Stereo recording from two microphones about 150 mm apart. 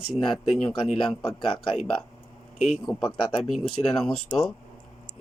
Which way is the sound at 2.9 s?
25° left (ahead or behind).